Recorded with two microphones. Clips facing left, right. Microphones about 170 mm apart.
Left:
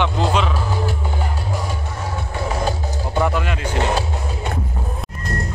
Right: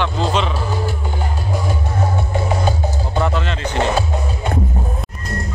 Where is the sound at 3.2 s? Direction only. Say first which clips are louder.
Even; 10° left (ahead or behind).